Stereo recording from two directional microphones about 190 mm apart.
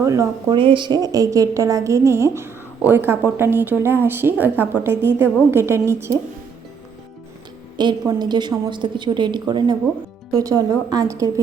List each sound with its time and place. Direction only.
0.0 s a woman's voice: 15° right (ahead or behind)
7.8 s a woman's voice: 20° right (ahead or behind)